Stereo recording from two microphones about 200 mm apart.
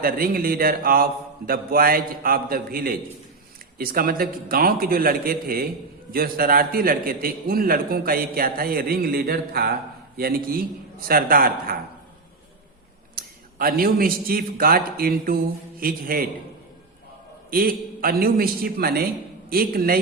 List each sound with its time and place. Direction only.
0.0 s a man's voice: 45° right (ahead or behind)
13.1 s a man's voice: 45° right (ahead or behind)
17.5 s a man's voice: 45° right (ahead or behind)